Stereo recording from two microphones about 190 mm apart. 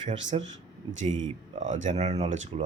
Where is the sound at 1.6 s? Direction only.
40° right (ahead or behind).